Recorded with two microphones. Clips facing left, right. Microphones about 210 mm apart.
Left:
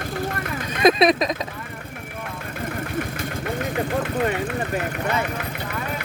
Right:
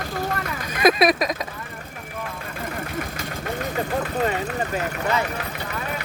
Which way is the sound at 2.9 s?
55° left (ahead or behind).